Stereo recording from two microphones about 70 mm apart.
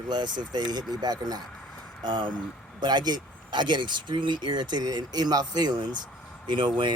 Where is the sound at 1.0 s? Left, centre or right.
Right.